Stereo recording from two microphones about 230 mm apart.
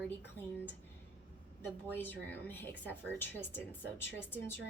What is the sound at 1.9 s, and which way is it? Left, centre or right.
A woman's voice, centre.